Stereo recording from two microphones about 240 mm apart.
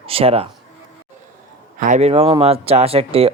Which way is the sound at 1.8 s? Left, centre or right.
Right.